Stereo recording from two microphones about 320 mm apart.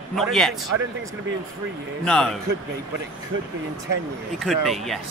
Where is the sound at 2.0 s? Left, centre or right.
Centre.